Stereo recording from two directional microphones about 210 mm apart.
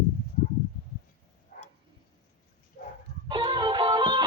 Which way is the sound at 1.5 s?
45° left (ahead or behind).